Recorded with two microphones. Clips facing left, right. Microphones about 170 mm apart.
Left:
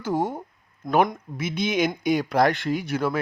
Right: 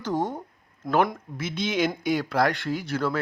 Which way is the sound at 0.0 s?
10° left (ahead or behind).